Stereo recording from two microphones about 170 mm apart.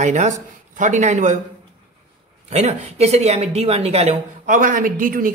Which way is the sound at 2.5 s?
40° right (ahead or behind).